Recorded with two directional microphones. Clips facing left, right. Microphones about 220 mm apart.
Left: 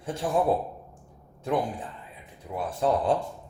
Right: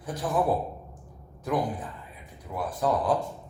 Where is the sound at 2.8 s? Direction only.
25° left (ahead or behind).